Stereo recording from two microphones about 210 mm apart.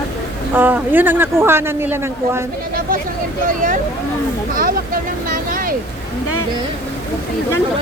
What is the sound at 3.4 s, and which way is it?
Speech, 40° right (ahead or behind).